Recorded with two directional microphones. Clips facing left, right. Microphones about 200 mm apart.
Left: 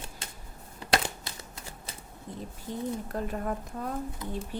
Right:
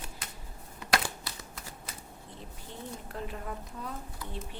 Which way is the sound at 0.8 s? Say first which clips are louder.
Left 2 dB; 25° left (ahead or behind).